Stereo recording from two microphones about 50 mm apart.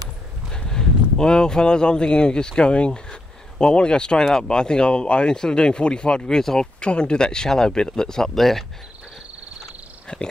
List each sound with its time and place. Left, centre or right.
0.5 s speech: centre
10.1 s speech: left